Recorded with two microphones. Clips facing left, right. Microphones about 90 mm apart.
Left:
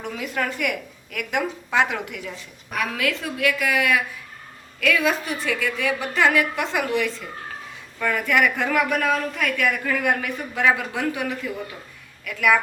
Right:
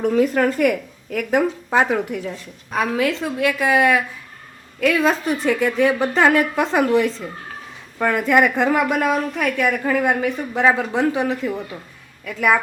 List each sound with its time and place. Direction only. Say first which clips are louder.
0.0 s a woman's voice: right 10 dB; 40° right (ahead or behind)